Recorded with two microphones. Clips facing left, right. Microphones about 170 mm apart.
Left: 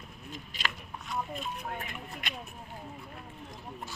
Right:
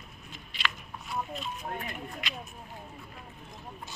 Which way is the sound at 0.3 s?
40° left (ahead or behind).